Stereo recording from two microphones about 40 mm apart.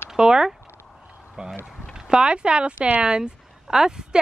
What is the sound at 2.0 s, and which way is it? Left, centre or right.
Speech, right.